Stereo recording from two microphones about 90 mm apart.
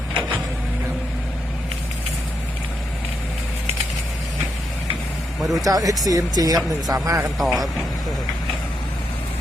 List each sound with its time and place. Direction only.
5.4 s speech: centre (ahead or behind)
5.6 s a man's voice: 40° right (ahead or behind)
7.3 s speech: centre (ahead or behind)